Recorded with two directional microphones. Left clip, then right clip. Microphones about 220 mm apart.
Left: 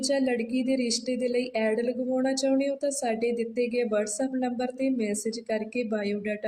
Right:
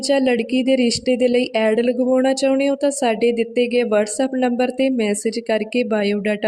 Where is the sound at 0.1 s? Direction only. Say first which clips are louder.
Right 11 dB; 45° right (ahead or behind).